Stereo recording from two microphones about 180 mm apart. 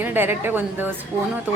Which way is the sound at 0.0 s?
10° right (ahead or behind).